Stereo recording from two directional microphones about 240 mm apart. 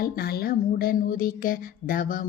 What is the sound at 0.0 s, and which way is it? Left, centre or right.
Speech, left.